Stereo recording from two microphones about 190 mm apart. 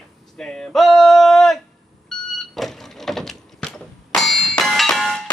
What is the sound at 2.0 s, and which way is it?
Vehicle, centre (ahead or behind).